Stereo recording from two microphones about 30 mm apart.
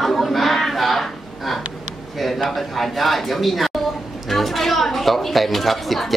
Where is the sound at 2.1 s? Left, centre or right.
Centre.